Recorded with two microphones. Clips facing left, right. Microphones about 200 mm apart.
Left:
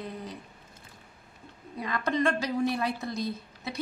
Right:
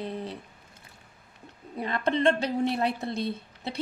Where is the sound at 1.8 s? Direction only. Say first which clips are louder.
Right 2 dB; 30° right (ahead or behind).